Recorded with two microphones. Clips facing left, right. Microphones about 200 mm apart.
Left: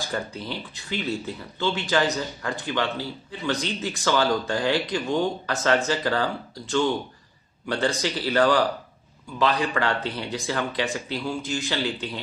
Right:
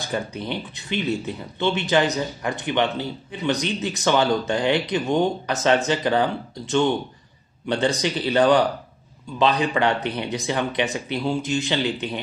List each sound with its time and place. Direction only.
0.1 s speech: 20° right (ahead or behind)